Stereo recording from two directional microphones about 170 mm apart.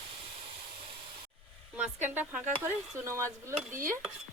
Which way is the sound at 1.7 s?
10° right (ahead or behind).